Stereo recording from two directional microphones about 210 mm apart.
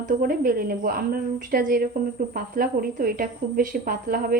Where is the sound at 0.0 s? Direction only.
45° right (ahead or behind).